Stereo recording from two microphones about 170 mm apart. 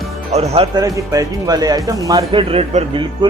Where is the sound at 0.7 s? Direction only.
20° right (ahead or behind).